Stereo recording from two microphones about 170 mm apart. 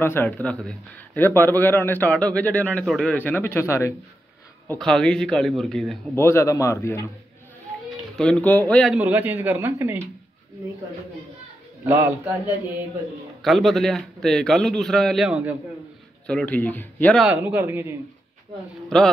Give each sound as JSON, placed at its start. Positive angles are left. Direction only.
{"t": 0.0, "sound": "a man's voice", "side_deg": 10}
{"t": 4.7, "sound": "a man's voice", "side_deg": 5}
{"t": 6.1, "sound": "a man's voice", "side_deg": 15}
{"t": 8.2, "sound": "a man's voice", "side_deg": 5}
{"t": 8.9, "sound": "speech", "side_deg": -10}
{"t": 11.8, "sound": "a man's voice", "side_deg": -15}
{"t": 13.4, "sound": "a man's voice", "side_deg": 0}
{"t": 16.3, "sound": "a man's voice", "side_deg": 5}
{"t": 17.2, "sound": "speech", "side_deg": -10}